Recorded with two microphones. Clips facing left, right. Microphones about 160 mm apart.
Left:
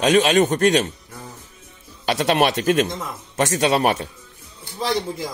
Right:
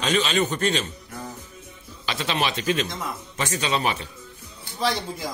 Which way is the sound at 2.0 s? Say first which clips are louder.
Left 8 dB; 55° left (ahead or behind).